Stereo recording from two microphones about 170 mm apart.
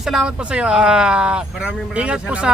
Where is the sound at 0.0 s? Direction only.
Centre (ahead or behind).